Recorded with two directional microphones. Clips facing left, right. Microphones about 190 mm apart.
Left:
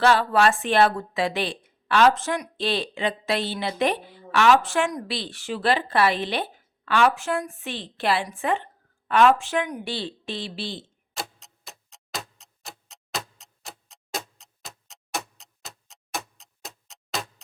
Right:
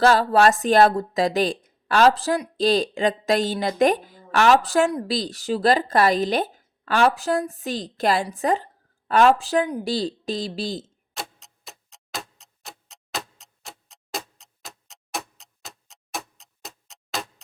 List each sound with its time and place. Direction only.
0.0 s a woman's voice: 40° right (ahead or behind)
11.1 s tick-tock: centre (ahead or behind)